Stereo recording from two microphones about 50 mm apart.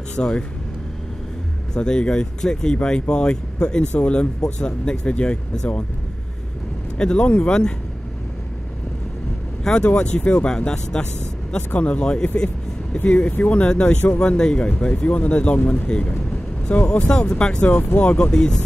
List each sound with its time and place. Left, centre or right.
0.1 s speech: centre
1.7 s speech: centre
7.0 s speech: left
9.6 s vehicle: centre
9.9 s speech: left
17.6 s speech: left; by 18.6 s centre